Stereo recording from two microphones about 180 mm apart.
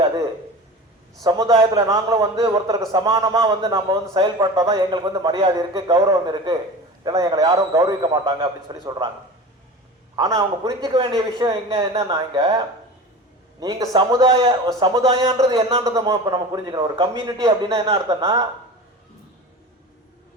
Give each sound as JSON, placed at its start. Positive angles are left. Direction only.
{"t": 1.2, "sound": "a man's voice", "side_deg": -20}
{"t": 10.2, "sound": "a man's voice", "side_deg": -20}
{"t": 13.6, "sound": "a man's voice", "side_deg": -20}